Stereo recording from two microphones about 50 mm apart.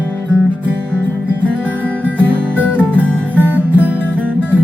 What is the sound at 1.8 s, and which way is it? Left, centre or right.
Music, right.